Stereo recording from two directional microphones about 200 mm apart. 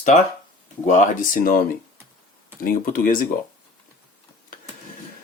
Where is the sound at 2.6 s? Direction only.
45° left (ahead or behind).